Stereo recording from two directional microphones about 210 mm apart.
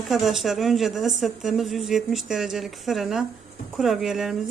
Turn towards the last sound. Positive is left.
turn(degrees=0)  # may be behind; listen again after turning